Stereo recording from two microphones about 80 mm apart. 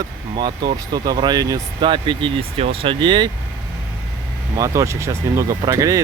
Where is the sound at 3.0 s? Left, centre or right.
Right.